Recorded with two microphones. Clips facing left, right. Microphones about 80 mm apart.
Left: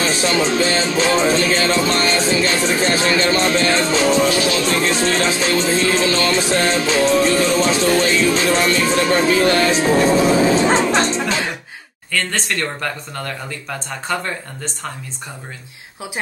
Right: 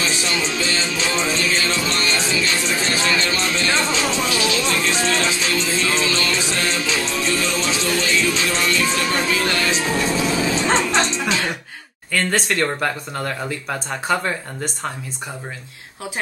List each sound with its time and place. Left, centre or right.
0.0 s music: left
10.7 s music: centre
11.1 s music: left
12.1 s speech: centre